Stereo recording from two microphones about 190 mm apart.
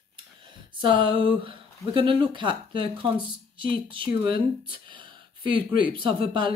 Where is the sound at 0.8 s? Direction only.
25° right (ahead or behind).